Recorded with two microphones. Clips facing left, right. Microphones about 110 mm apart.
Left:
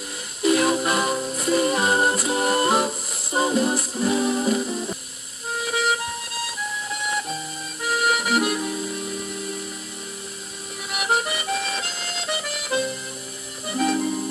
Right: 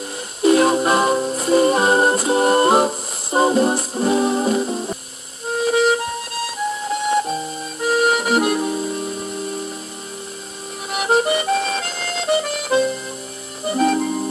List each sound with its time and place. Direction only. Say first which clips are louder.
0.4 s music: right 5 dB; 35° right (ahead or behind)
10.9 s music: right 7 dB; 35° right (ahead or behind)